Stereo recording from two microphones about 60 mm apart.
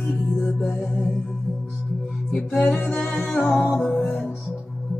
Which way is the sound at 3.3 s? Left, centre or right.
Centre.